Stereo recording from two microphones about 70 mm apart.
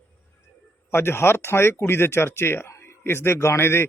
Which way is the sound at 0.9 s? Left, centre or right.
Left.